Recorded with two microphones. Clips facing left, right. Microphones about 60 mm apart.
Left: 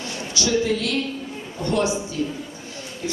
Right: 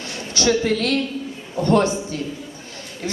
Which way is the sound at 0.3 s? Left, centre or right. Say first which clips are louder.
Right 3 dB; right.